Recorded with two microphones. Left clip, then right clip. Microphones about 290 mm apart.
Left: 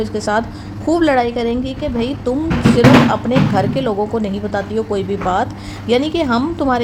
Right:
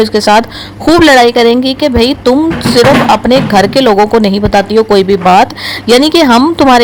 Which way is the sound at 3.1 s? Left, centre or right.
Right.